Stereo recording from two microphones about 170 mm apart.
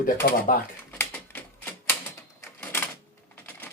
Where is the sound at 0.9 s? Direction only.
10° left (ahead or behind).